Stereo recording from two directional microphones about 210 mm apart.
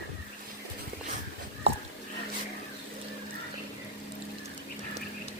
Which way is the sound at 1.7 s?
30° right (ahead or behind).